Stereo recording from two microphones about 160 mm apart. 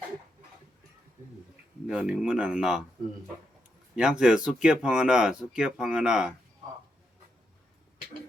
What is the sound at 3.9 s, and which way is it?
Speech, 5° right (ahead or behind).